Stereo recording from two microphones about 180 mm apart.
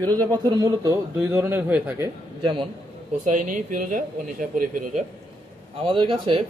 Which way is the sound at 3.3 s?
45° right (ahead or behind).